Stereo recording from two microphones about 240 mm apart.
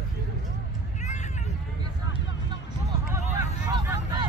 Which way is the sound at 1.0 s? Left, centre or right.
Left.